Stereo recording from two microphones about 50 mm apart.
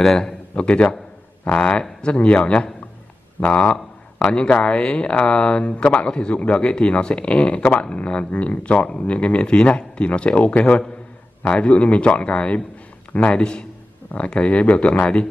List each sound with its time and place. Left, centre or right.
0.0 s a man's voice: centre